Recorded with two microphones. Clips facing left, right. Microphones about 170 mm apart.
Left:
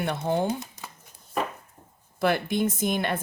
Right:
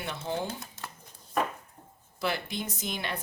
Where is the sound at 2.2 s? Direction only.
55° left (ahead or behind).